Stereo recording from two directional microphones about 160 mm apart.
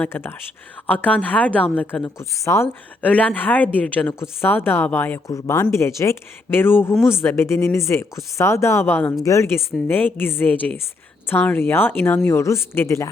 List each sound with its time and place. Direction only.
0.0 s a woman's voice: 15° left (ahead or behind)